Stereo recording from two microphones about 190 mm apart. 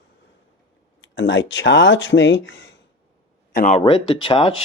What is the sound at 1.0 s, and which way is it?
Speech, 70° left (ahead or behind).